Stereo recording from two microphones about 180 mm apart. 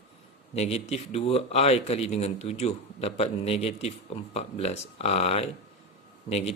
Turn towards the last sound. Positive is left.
turn(degrees=35)  # may be behind; listen again after turning